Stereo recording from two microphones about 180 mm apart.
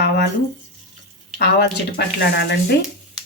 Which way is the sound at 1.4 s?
65° left (ahead or behind).